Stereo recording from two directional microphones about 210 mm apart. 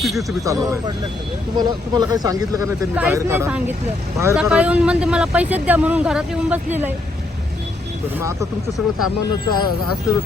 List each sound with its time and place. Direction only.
0.0 s speech: centre (ahead or behind)
0.4 s speech: 15° right (ahead or behind)
8.2 s speech: 15° right (ahead or behind)
9.6 s speech: 90° left